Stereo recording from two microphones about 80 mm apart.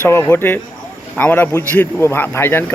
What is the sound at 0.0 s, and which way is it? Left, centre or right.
Speech, left.